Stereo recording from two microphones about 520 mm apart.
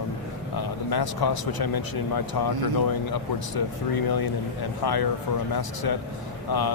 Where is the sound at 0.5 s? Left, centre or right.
Left.